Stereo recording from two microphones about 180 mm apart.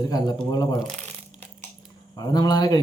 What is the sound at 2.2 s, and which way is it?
Speech, 20° left (ahead or behind).